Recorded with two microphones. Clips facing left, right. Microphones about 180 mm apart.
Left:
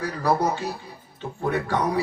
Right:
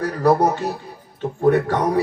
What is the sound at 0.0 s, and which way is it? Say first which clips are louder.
A man's voice: right 6 dB; 40° right (ahead or behind).